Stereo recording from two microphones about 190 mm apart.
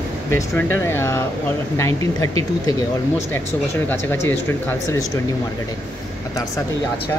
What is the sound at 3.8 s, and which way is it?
Speech, 10° left (ahead or behind).